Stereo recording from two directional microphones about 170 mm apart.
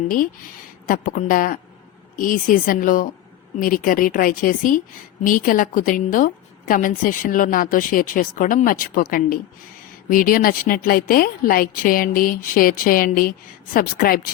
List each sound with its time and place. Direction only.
0.9 s a woman's voice: 55° left (ahead or behind)